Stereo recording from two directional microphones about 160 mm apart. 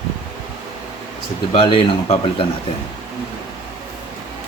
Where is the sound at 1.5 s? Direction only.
35° left (ahead or behind).